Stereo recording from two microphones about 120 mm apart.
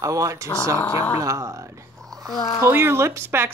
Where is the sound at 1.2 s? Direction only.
25° right (ahead or behind).